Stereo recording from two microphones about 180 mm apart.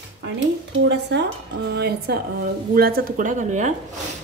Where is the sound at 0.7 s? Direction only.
75° right (ahead or behind).